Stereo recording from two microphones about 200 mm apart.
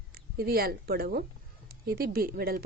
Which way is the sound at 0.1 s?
50° right (ahead or behind).